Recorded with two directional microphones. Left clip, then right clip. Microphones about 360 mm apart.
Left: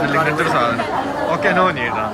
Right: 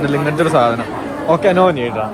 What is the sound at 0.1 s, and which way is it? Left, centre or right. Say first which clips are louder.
Speech: right 1 dB; centre.